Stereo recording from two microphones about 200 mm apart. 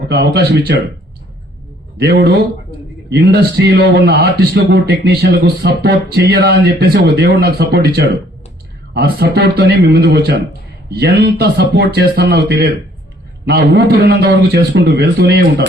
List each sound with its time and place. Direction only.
0.1 s speech: 55° right (ahead or behind)
2.0 s speech: 55° right (ahead or behind)